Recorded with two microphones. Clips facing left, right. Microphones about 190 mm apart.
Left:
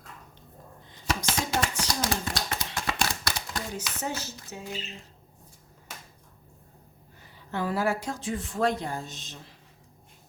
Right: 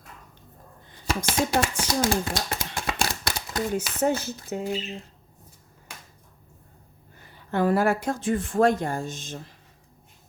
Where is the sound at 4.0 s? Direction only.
55° right (ahead or behind).